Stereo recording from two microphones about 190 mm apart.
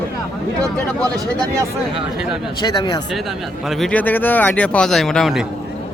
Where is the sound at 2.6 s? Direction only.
20° left (ahead or behind).